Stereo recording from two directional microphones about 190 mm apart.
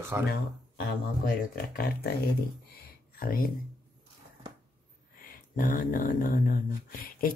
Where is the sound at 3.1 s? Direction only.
50° left (ahead or behind).